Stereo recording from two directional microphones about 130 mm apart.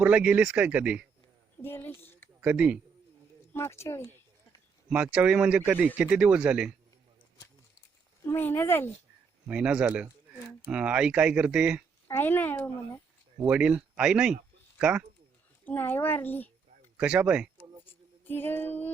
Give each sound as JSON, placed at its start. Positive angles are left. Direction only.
{"t": 0.0, "sound": "speech", "side_deg": -10}
{"t": 1.6, "sound": "speech", "side_deg": 15}
{"t": 2.4, "sound": "speech", "side_deg": -10}
{"t": 3.5, "sound": "speech", "side_deg": 20}
{"t": 4.9, "sound": "speech", "side_deg": -10}
{"t": 8.3, "sound": "speech", "side_deg": 15}
{"t": 9.5, "sound": "speech", "side_deg": -10}
{"t": 12.0, "sound": "speech", "side_deg": 15}
{"t": 13.4, "sound": "speech", "side_deg": -10}
{"t": 15.6, "sound": "speech", "side_deg": 15}
{"t": 17.0, "sound": "speech", "side_deg": -10}
{"t": 17.6, "sound": "a sound", "side_deg": 15}